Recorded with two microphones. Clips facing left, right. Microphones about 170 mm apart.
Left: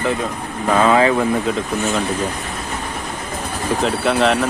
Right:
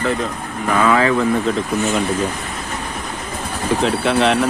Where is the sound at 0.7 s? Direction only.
25° left (ahead or behind).